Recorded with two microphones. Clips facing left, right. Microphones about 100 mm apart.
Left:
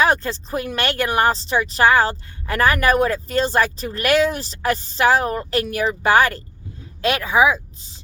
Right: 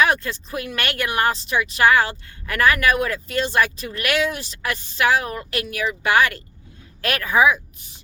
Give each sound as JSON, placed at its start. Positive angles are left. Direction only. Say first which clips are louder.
{"t": 0.0, "sound": "speech", "louder": "left 1 dB", "side_deg": 30}
{"t": 7.0, "sound": "a woman's voice", "louder": "left 1 dB", "side_deg": 20}